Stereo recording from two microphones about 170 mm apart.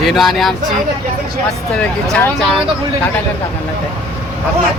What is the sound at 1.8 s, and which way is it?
Speech, 5° left (ahead or behind).